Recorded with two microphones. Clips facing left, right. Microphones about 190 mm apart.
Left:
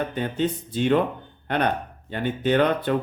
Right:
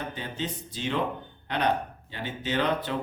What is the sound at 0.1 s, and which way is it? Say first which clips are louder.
Speech: left 9 dB; 55° left (ahead or behind).